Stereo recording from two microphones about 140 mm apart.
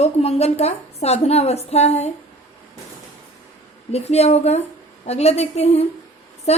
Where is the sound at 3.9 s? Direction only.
50° left (ahead or behind).